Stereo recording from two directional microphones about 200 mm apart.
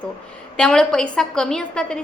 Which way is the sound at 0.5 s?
5° left (ahead or behind).